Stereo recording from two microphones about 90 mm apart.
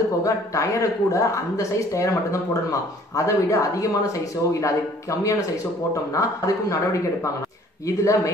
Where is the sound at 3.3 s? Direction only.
35° left (ahead or behind).